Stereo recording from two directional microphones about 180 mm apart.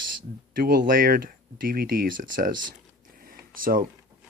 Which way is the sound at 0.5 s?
55° right (ahead or behind).